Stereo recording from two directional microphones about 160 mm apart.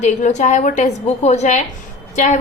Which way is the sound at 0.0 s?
50° left (ahead or behind).